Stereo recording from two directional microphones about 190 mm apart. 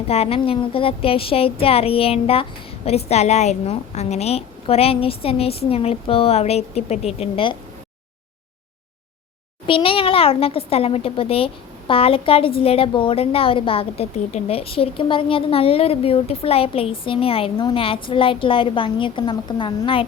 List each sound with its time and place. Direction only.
0.1 s a woman's voice: 30° left (ahead or behind)
9.6 s a child's voice: 30° left (ahead or behind)